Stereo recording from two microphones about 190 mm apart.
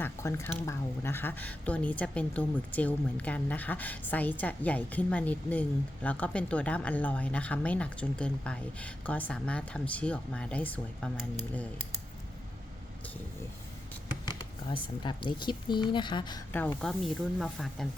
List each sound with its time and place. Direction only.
0.0 s speech: 15° left (ahead or behind)
14.3 s speech: 25° left (ahead or behind)
16.8 s speech: centre (ahead or behind)